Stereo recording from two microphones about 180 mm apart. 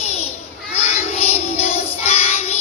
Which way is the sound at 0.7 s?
35° left (ahead or behind).